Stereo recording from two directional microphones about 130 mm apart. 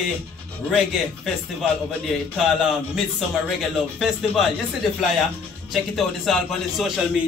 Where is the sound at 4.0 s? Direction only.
Centre (ahead or behind).